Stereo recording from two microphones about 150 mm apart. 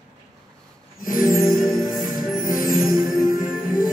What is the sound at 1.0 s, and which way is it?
Music, 65° left (ahead or behind).